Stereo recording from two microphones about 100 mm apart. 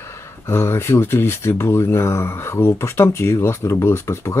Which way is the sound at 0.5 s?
25° left (ahead or behind).